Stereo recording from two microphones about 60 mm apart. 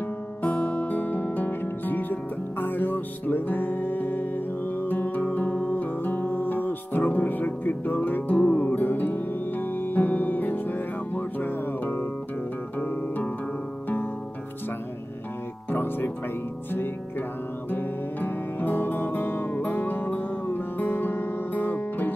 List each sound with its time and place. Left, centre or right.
0.4 s music: left
15.7 s music: left
17.6 s music: left